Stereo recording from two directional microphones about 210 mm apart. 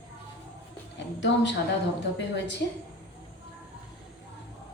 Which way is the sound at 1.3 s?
60° left (ahead or behind).